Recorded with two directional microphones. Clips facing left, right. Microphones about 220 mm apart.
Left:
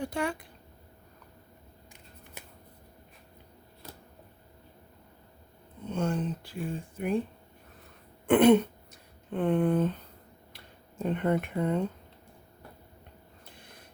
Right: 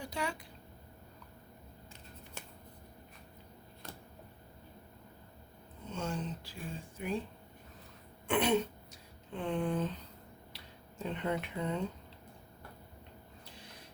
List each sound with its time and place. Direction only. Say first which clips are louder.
0.0 s speech: left 7 dB; 55° left (ahead or behind)
5.9 s a sound: left 8 dB; 55° left (ahead or behind)
7.0 s speech: left 7 dB; 55° left (ahead or behind)
8.3 s throat clearing: left 10 dB; 55° left (ahead or behind)
9.3 s a sound: left 8 dB; 55° left (ahead or behind)
13.5 s snort: left 1 dB; 50° left (ahead or behind)